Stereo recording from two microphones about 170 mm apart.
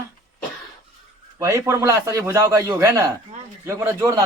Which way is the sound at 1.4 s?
15° right (ahead or behind).